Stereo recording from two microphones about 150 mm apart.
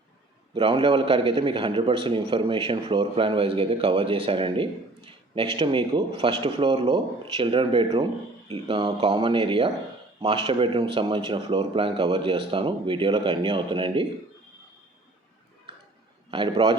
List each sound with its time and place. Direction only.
0.5 s a man's voice: 35° right (ahead or behind)
16.3 s a man's voice: 35° right (ahead or behind)